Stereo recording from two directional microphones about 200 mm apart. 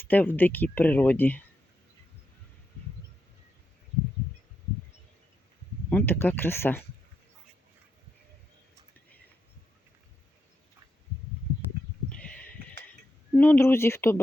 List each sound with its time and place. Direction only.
0.0 s speech: 10° left (ahead or behind)
5.9 s speech: 10° left (ahead or behind)
12.0 s a sound: 5° left (ahead or behind)
13.3 s speech: 10° left (ahead or behind)